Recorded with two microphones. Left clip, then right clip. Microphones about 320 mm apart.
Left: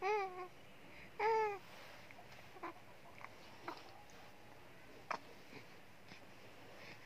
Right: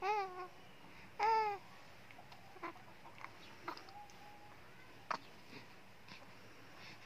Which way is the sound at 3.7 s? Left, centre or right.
Centre.